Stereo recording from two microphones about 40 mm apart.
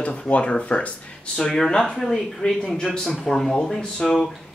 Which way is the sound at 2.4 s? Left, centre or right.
Left.